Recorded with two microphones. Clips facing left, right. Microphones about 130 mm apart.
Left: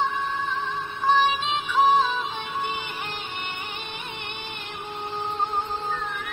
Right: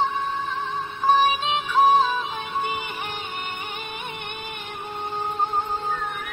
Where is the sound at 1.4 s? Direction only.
Centre (ahead or behind).